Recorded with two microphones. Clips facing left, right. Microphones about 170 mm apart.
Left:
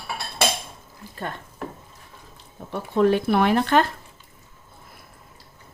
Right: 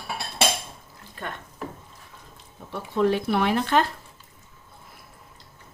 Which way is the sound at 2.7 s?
50° left (ahead or behind).